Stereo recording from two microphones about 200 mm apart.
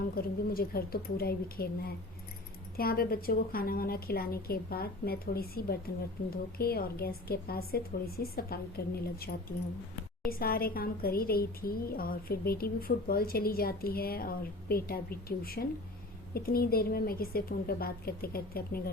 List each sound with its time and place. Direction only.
0.0 s a woman's voice: 50° left (ahead or behind)